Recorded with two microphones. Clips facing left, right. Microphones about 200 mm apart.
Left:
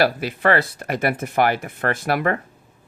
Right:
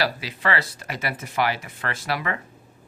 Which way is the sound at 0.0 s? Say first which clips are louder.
Left 7 dB; 55° left (ahead or behind).